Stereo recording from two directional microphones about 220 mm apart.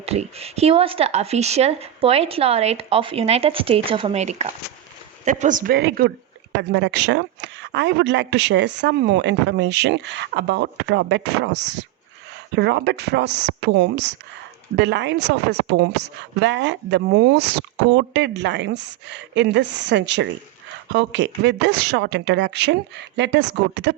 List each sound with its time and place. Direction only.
0.0 s a woman's voice: 30° right (ahead or behind); by 23.9 s 50° right (ahead or behind)